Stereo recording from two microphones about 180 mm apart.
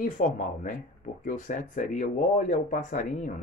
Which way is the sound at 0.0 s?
45° left (ahead or behind).